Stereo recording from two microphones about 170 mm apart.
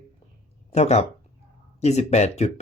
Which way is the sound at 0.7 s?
40° left (ahead or behind).